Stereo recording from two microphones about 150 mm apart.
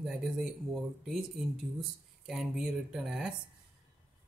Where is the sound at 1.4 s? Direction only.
Centre (ahead or behind).